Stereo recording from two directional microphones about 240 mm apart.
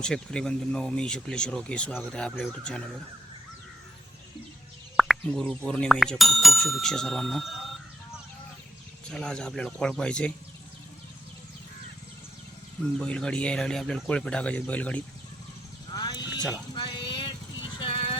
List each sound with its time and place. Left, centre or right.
0.0 s speech: centre
4.9 s speech: centre
9.0 s speech: centre
13.0 s speech: centre
15.9 s a sound: centre
17.7 s vehicle: left